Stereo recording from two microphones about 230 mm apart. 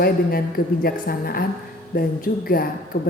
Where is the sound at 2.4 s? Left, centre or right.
Left.